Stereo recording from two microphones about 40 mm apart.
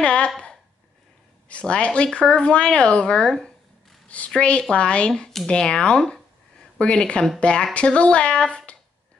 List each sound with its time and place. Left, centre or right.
0.0 s a sound: left
1.5 s speech: left
4.4 s speech: left